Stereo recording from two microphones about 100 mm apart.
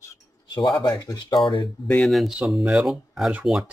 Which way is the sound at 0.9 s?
40° left (ahead or behind).